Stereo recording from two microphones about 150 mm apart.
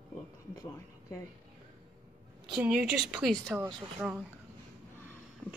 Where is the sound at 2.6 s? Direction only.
10° right (ahead or behind).